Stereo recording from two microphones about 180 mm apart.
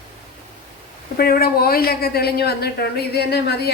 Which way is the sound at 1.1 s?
55° left (ahead or behind).